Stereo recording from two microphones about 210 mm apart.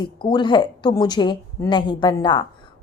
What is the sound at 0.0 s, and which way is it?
A woman's voice, 20° left (ahead or behind).